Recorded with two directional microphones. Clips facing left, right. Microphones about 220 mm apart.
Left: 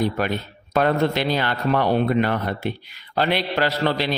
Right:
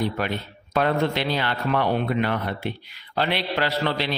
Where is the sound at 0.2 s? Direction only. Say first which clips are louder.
Left 3 dB; 45° left (ahead or behind).